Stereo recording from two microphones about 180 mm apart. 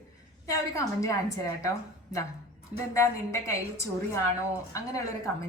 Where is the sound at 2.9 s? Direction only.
15° left (ahead or behind).